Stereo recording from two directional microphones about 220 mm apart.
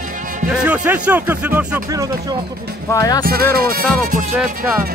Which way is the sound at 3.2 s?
45° right (ahead or behind).